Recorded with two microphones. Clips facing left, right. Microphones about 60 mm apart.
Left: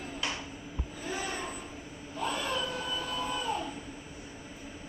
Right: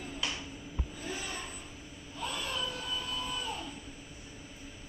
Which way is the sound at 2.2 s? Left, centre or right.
Left.